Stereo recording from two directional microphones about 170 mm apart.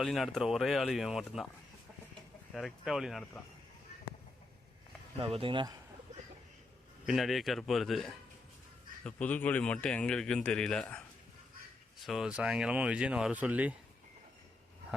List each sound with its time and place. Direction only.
0.0 s speech: centre (ahead or behind)
2.6 s speech: centre (ahead or behind)
5.2 s speech: 35° right (ahead or behind)
7.0 s speech: centre (ahead or behind)
12.0 s speech: 5° right (ahead or behind)